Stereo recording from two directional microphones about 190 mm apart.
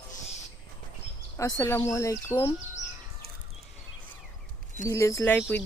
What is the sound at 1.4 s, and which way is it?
Speech, 15° left (ahead or behind).